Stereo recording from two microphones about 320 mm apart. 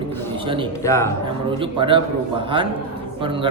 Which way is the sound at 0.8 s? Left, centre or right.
Centre.